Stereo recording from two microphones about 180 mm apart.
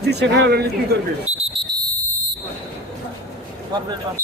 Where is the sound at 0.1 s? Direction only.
70° right (ahead or behind).